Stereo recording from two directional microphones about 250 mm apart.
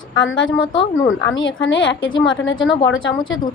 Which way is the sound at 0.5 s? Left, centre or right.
Centre.